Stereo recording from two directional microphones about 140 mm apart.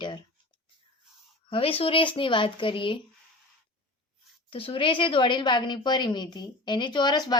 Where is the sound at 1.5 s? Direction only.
40° left (ahead or behind).